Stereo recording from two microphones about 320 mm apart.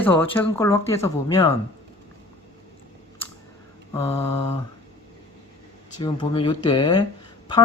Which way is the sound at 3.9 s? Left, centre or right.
Centre.